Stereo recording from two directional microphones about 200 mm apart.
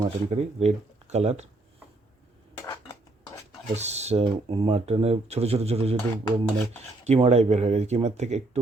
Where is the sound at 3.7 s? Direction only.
35° right (ahead or behind).